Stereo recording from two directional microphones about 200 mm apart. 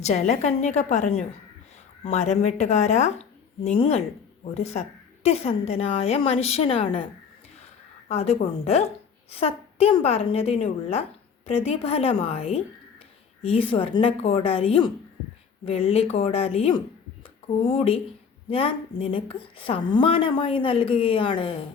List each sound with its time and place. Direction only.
0.0 s a woman's voice: 35° left (ahead or behind)
8.1 s a woman's voice: 30° left (ahead or behind)